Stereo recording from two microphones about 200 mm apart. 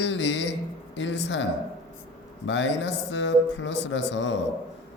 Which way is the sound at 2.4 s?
65° left (ahead or behind).